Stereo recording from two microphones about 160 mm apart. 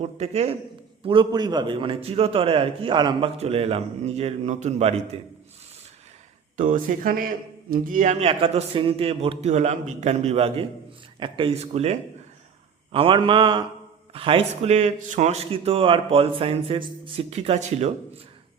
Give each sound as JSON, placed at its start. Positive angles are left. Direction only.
{"t": 0.0, "sound": "a man's voice", "side_deg": -40}
{"t": 1.0, "sound": "a man's voice", "side_deg": -30}
{"t": 6.6, "sound": "a man's voice", "side_deg": -55}